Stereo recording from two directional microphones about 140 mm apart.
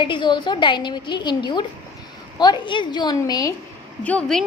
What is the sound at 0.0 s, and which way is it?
A woman's voice, 35° left (ahead or behind).